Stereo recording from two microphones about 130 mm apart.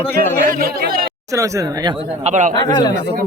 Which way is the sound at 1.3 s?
25° right (ahead or behind).